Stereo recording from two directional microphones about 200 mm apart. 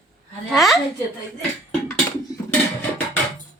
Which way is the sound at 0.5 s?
Centre (ahead or behind).